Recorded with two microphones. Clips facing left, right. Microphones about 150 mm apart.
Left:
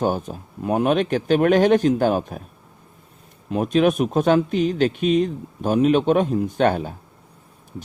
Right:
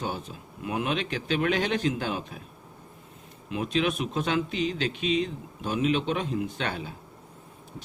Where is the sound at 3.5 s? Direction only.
50° left (ahead or behind).